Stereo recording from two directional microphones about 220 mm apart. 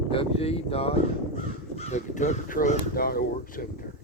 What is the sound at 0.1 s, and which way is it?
Speech, 25° left (ahead or behind).